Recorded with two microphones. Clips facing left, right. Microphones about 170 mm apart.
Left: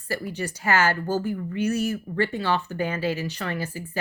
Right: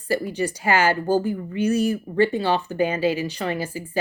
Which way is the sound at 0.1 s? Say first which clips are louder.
Right 6 dB; 15° right (ahead or behind).